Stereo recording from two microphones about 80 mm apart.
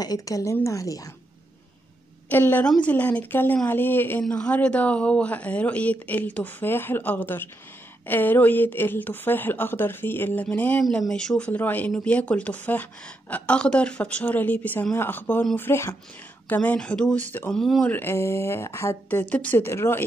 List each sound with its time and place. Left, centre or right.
0.0 s a woman's voice: left
2.2 s speech: left
11.1 s speech: centre; by 16.0 s left
16.4 s speech: centre
17.8 s speech: left
19.6 s speech: left